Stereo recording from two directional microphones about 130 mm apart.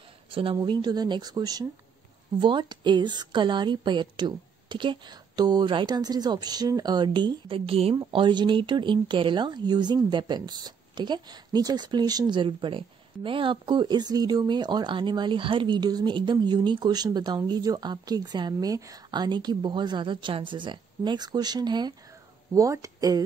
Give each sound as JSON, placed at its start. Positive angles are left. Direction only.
{"t": 0.3, "sound": "speech", "side_deg": -45}